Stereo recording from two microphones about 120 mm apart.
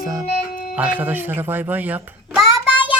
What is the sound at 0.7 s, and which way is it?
Speech, 15° right (ahead or behind).